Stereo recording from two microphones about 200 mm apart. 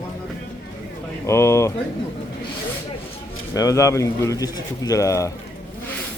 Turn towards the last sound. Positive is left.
turn(degrees=15)  # may be behind; listen again after turning